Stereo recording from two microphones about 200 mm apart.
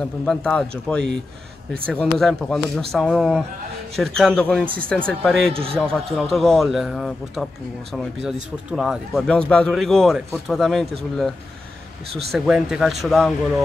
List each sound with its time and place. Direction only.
0.2 s speech: 5° left (ahead or behind)
5.5 s a man's voice: 30° right (ahead or behind)
5.8 s speech: 5° left (ahead or behind)
12.2 s speech: centre (ahead or behind)